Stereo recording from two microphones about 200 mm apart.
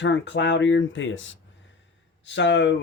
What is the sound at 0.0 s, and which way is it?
Speech, 60° left (ahead or behind).